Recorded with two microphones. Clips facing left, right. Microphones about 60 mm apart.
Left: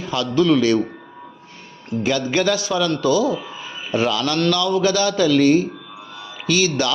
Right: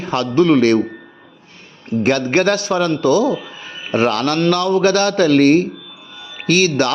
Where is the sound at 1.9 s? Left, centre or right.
Right.